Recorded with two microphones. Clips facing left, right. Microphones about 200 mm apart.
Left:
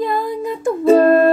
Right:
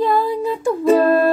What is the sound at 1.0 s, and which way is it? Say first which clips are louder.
Music: left 3 dB; 50° left (ahead or behind).